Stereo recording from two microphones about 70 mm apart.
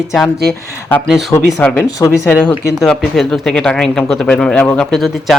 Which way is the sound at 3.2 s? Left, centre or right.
Centre.